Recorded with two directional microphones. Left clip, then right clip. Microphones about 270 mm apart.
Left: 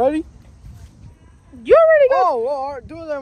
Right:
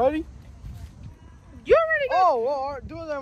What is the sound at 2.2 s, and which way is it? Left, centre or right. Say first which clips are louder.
Speech: left 3 dB; left.